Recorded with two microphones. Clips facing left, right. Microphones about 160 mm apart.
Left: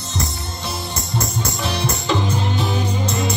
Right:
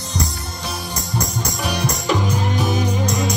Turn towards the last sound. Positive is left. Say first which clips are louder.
# right 2 dB
turn(degrees=-10)  # may be behind; listen again after turning